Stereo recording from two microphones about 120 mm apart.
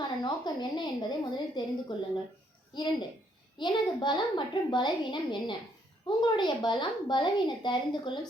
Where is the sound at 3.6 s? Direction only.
40° left (ahead or behind).